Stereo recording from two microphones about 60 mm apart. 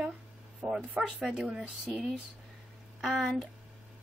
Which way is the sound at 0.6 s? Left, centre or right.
Centre.